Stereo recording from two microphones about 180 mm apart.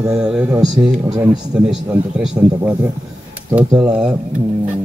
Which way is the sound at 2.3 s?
15° right (ahead or behind).